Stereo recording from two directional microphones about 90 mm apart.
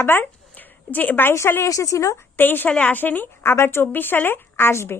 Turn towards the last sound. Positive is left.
turn(degrees=25)  # may be behind; listen again after turning